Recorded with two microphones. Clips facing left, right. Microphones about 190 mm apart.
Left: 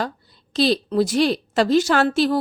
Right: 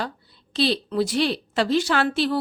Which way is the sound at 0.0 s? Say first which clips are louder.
Left 4 dB; 45° left (ahead or behind).